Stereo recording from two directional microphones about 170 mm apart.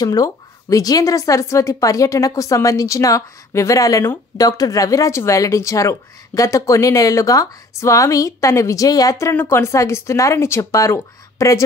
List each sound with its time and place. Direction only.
0.0 s a woman's voice: 20° left (ahead or behind)